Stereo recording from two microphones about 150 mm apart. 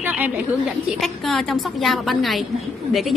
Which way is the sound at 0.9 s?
Centre (ahead or behind).